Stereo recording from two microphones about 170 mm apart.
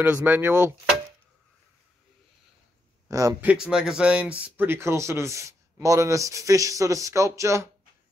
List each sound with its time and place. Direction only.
0.0 s speech: 10° right (ahead or behind)
3.1 s speech: 20° right (ahead or behind)
3.4 s speech: 5° right (ahead or behind)